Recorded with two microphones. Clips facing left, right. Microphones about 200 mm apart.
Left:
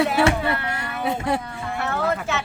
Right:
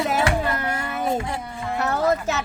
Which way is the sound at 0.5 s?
40° right (ahead or behind).